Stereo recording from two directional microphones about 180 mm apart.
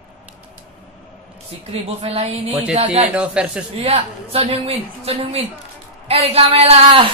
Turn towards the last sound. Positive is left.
turn(degrees=-30)  # may be behind; listen again after turning